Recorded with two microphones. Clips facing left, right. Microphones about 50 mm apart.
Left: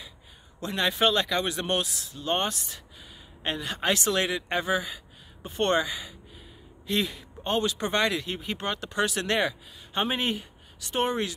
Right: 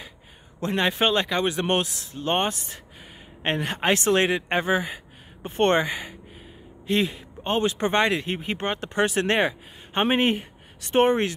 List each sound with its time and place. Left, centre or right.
0.6 s a man's voice: right